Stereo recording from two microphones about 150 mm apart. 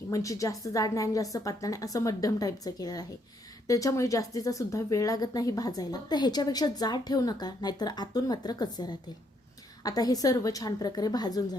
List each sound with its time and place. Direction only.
0.1 s speech: 20° left (ahead or behind)